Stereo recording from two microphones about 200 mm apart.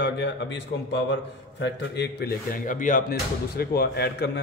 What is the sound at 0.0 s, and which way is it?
A man's voice, 60° left (ahead or behind).